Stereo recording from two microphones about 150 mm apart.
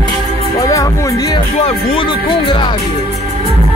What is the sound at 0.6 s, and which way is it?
Music, 20° left (ahead or behind).